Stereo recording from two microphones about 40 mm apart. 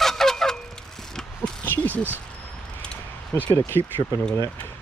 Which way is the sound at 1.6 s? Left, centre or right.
Left.